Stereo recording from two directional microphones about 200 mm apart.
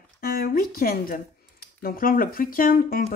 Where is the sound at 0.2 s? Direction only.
45° left (ahead or behind).